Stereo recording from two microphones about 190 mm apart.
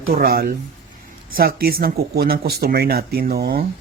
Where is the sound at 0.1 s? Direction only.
55° right (ahead or behind).